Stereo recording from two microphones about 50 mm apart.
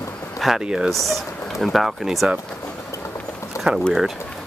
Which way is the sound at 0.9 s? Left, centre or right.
Centre.